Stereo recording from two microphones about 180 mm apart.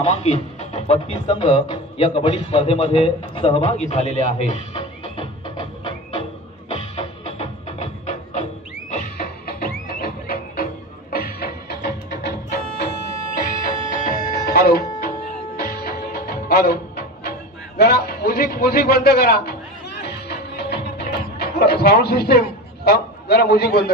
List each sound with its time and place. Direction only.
0.0 s speech: 40° left (ahead or behind)
6.7 s music: 35° left (ahead or behind)
8.9 s music: 50° left (ahead or behind); by 12.8 s 70° left (ahead or behind)
13.8 s music: 55° left (ahead or behind)
17.7 s a sound: 60° left (ahead or behind)
20.0 s music: 65° left (ahead or behind)
21.4 s a sound: 60° left (ahead or behind)
22.8 s a man's voice: 60° left (ahead or behind)